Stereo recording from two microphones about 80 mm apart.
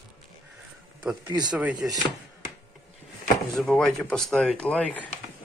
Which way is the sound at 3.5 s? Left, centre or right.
Centre.